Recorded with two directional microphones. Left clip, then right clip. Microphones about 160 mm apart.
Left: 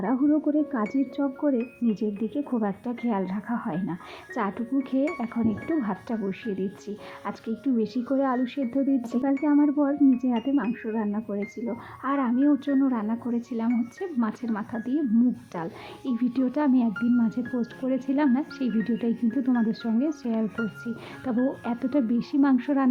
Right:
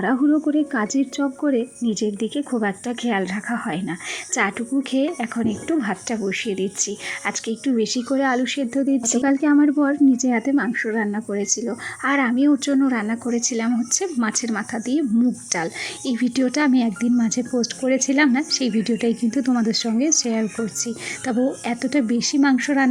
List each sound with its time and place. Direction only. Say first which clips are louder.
0.2 s speech: right 4 dB; 25° right (ahead or behind)
1.5 s speech: right 4 dB; 5° right (ahead or behind)
9.2 s speech: right 5 dB; 20° right (ahead or behind)